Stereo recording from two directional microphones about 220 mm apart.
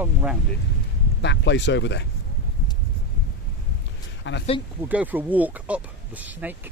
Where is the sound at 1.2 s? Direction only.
55° left (ahead or behind).